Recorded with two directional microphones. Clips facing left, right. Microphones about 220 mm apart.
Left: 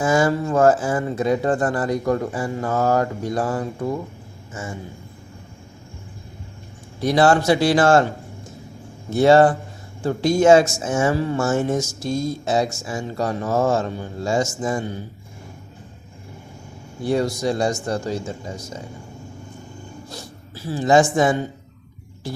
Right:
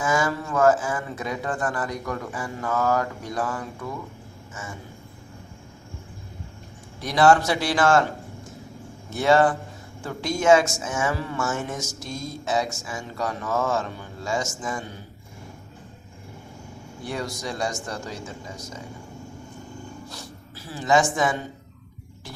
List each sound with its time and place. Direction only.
0.0 s speech: 30° left (ahead or behind)
7.0 s a man's voice: 30° left (ahead or behind)
9.0 s speech: 30° left (ahead or behind)
17.0 s speech: 30° left (ahead or behind)
20.7 s speech: 30° left (ahead or behind)